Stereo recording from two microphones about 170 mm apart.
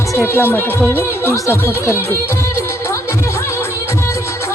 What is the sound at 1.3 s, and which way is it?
Music, 15° left (ahead or behind).